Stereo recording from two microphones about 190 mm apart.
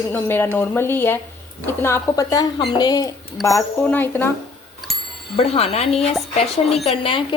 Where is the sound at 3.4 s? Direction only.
Centre (ahead or behind).